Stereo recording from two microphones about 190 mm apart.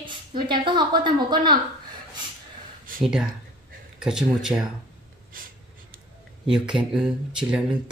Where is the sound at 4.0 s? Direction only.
5° right (ahead or behind).